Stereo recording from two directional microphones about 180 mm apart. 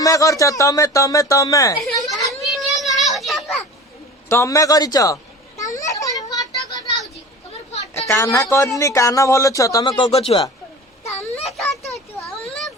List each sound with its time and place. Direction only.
0.0 s speech: 20° left (ahead or behind)
2.0 s children playing: centre (ahead or behind)
4.3 s children playing: 15° left (ahead or behind)
7.9 s speech: 15° left (ahead or behind); by 10.4 s 35° left (ahead or behind)
11.0 s a sound: 15° left (ahead or behind)